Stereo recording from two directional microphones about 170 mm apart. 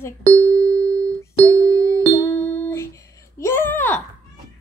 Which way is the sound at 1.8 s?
15° left (ahead or behind).